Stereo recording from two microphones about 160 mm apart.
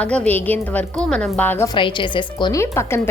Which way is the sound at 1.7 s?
30° left (ahead or behind).